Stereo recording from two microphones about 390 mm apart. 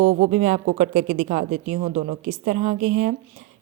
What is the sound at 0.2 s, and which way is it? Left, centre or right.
A woman's voice, centre.